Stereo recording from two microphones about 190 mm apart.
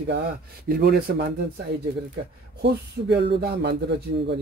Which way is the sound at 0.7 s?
55° right (ahead or behind).